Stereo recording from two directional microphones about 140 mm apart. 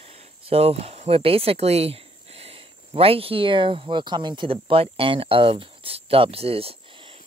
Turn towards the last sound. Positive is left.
turn(degrees=-45)  # may be behind; listen again after turning